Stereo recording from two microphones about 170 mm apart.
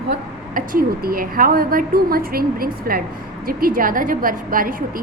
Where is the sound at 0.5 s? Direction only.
55° right (ahead or behind).